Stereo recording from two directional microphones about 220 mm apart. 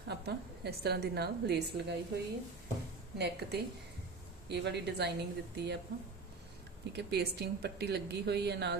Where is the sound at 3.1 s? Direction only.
50° right (ahead or behind).